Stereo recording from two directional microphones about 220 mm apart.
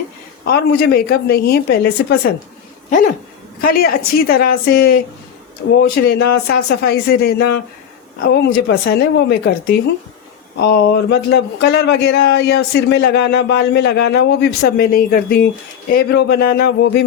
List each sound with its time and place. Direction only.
0.4 s speech: 45° left (ahead or behind)
3.6 s speech: 45° left (ahead or behind)